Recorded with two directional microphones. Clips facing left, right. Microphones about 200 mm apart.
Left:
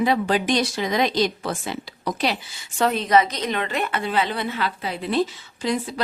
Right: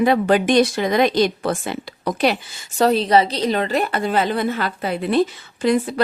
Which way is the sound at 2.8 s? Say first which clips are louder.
Right 4 dB; 35° right (ahead or behind).